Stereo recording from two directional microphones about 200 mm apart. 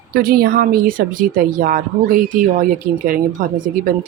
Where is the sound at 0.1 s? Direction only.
50° right (ahead or behind).